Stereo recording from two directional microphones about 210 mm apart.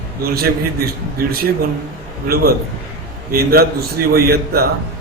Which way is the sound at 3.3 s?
45° right (ahead or behind).